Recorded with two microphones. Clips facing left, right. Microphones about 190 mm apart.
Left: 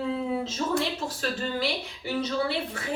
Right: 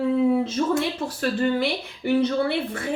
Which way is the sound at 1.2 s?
55° right (ahead or behind).